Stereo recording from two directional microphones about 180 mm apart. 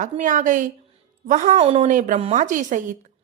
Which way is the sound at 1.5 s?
35° right (ahead or behind).